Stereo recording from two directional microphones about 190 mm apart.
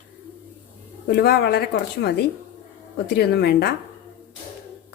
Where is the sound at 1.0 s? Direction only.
55° left (ahead or behind).